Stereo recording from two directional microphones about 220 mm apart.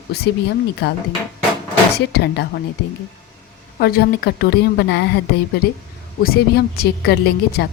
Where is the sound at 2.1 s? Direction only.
50° left (ahead or behind).